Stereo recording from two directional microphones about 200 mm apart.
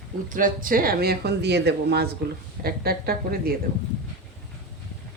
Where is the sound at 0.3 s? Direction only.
40° right (ahead or behind).